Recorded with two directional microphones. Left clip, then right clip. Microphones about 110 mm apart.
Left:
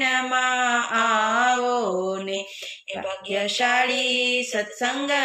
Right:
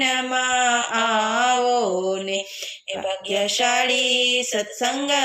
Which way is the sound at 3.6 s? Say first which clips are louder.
Left 1 dB; 40° right (ahead or behind).